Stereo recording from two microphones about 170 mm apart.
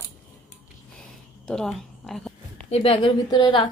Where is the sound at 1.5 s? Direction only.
Centre (ahead or behind).